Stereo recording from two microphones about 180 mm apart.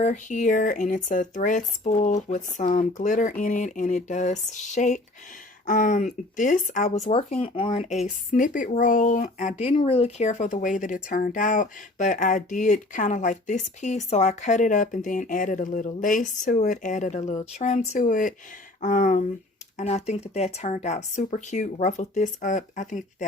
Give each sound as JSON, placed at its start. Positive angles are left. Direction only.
{"t": 0.0, "sound": "a woman's voice", "side_deg": 45}
{"t": 7.1, "sound": "a woman's voice", "side_deg": 30}